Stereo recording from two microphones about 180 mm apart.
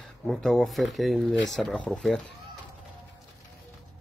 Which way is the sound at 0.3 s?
5° left (ahead or behind).